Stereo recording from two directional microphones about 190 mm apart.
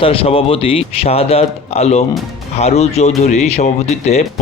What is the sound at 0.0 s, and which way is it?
Speech, 30° left (ahead or behind).